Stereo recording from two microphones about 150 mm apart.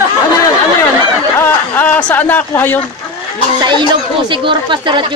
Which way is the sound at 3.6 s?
30° right (ahead or behind).